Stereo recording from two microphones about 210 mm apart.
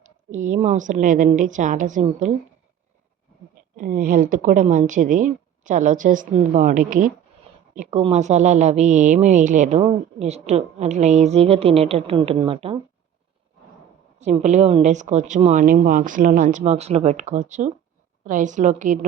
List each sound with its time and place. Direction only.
0.3 s a woman's voice: 35° right (ahead or behind)
3.8 s a woman's voice: 40° right (ahead or behind)
14.2 s a woman's voice: 35° right (ahead or behind)